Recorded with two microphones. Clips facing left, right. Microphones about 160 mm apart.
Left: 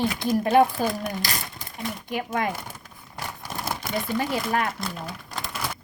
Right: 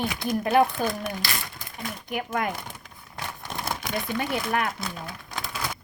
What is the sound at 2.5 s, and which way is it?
Speech, 5° left (ahead or behind).